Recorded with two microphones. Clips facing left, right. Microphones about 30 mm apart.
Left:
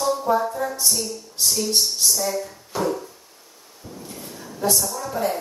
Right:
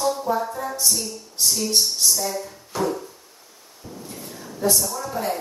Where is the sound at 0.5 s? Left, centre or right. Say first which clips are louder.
Left 3 dB; centre.